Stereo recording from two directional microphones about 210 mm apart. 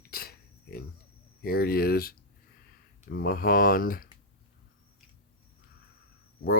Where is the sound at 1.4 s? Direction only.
45° left (ahead or behind).